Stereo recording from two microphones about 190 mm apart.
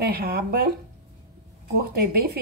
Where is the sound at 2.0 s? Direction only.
50° right (ahead or behind).